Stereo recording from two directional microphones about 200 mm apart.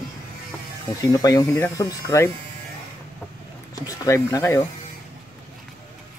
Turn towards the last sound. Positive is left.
turn(degrees=15)  # may be behind; listen again after turning